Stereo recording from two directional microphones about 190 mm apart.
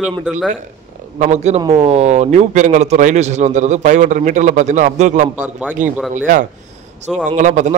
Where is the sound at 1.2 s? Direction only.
35° right (ahead or behind).